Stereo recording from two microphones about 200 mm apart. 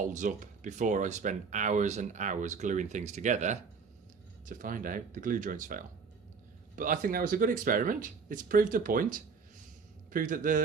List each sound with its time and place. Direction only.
0.0 s speech: 40° right (ahead or behind)